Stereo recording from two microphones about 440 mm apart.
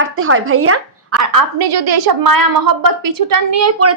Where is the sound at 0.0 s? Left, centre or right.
Right.